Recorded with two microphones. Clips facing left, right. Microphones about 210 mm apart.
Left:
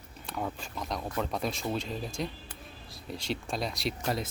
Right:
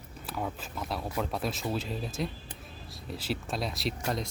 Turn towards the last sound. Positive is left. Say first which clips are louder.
# even
turn(degrees=0)  # may be behind; listen again after turning